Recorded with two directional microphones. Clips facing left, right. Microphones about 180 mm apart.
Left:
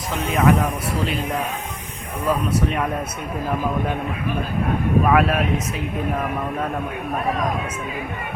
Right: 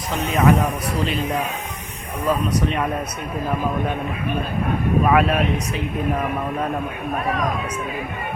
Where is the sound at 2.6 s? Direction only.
5° left (ahead or behind).